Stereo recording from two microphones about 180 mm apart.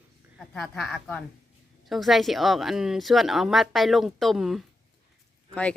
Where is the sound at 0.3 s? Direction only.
Centre (ahead or behind).